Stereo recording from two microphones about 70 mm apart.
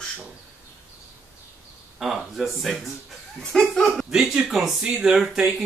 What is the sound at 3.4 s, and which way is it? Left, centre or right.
Speech, centre.